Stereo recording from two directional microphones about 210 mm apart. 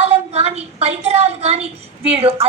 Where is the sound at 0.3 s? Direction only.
30° right (ahead or behind).